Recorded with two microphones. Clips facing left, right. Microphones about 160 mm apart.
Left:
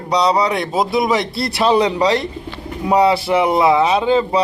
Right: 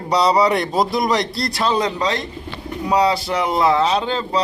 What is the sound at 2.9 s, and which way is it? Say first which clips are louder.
Speech: left 3 dB; 25° left (ahead or behind).